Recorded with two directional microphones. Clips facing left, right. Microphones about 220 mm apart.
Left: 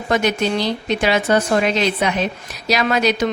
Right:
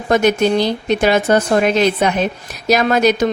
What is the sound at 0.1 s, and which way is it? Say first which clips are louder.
Speech: right 5 dB; 45° right (ahead or behind).